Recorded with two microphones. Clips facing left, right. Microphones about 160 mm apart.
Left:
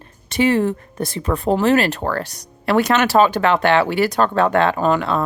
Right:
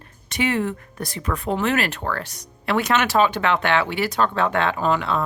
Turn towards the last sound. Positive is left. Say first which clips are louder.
# left 4 dB
turn(degrees=45)  # may be behind; listen again after turning